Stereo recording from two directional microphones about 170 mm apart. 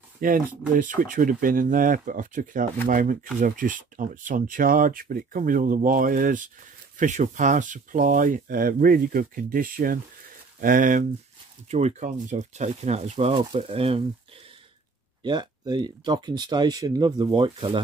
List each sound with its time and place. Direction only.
0.2 s speech: 55° right (ahead or behind); by 14.0 s 35° right (ahead or behind)
15.2 s speech: 25° right (ahead or behind)